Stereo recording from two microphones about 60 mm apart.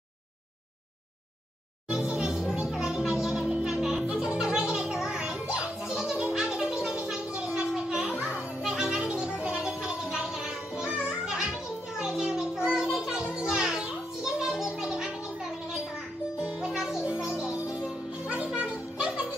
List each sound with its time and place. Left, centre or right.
1.9 s music: centre
7.5 s a sound: centre
8.2 s children playing: centre
9.6 s music: centre
12.0 s a sound: centre
13.0 s children playing: centre
16.4 s music: centre
18.6 s music: centre